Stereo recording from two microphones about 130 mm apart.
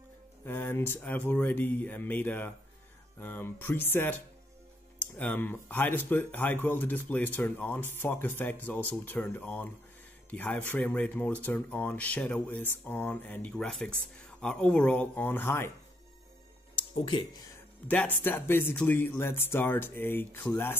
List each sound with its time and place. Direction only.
0.5 s speech: 20° left (ahead or behind)
16.9 s speech: 40° left (ahead or behind)
17.8 s speech: 15° left (ahead or behind)